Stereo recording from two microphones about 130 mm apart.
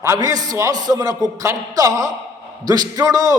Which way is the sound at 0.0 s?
25° right (ahead or behind).